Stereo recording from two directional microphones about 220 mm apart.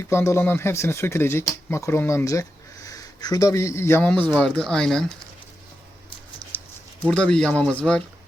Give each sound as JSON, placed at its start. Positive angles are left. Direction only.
{"t": 0.0, "sound": "speech", "side_deg": 10}
{"t": 7.1, "sound": "speech", "side_deg": 5}